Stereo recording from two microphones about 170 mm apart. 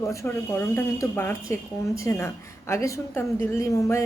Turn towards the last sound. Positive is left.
turn(degrees=15)  # may be behind; listen again after turning